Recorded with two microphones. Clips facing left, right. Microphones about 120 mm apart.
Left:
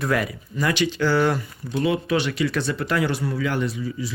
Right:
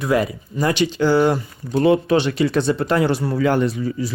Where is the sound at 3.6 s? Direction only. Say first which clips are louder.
Right 6 dB; 50° right (ahead or behind).